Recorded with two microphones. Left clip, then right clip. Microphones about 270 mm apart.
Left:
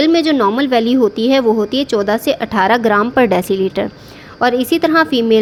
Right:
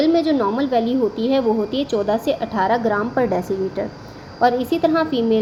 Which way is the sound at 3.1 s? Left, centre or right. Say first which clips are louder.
Left 7 dB; left.